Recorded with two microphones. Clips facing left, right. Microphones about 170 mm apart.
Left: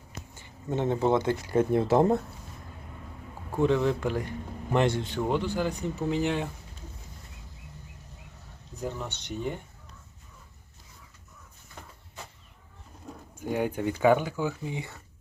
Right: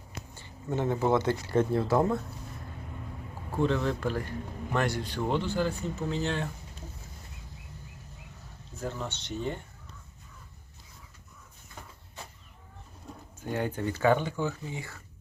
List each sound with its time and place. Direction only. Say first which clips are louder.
0.3 s speech: left 1 dB; 15° left (ahead or behind)
3.6 s speech: left 3 dB; 15° left (ahead or behind)
8.7 s speech: left 1 dB; 15° left (ahead or behind)
13.4 s speech: left 3 dB; 10° left (ahead or behind)